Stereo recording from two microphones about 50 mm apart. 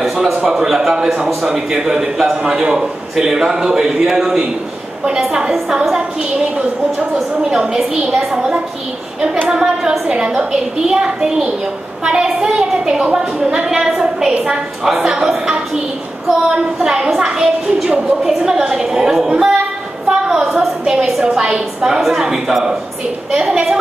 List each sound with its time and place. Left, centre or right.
0.0 s a sound: centre
0.4 s a man's voice: centre
5.5 s a man's voice: centre
7.5 s a man's voice: centre
14.8 s a woman's voice: centre
16.8 s a man's voice: centre